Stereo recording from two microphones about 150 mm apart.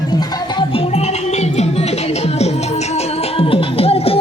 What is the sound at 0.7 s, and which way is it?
Music, 40° left (ahead or behind).